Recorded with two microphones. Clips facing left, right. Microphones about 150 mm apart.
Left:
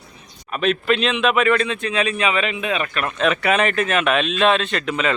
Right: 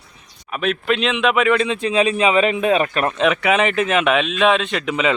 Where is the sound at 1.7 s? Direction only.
30° right (ahead or behind).